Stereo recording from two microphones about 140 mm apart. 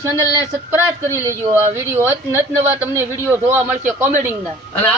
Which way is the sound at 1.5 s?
15° right (ahead or behind).